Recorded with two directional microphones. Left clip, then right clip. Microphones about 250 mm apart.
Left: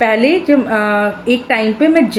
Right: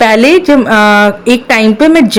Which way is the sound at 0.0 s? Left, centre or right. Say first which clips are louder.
Right 6 dB; right.